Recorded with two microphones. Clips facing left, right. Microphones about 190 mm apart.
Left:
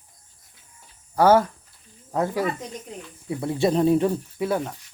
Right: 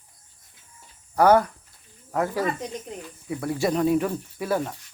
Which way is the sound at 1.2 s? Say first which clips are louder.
Left 1 dB; 25° left (ahead or behind).